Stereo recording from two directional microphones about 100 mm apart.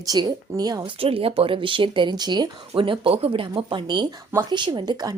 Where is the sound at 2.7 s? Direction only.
65° right (ahead or behind); by 5.2 s 40° right (ahead or behind).